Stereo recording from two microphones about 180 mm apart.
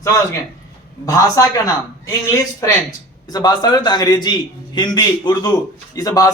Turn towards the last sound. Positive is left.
turn(degrees=20)  # may be behind; listen again after turning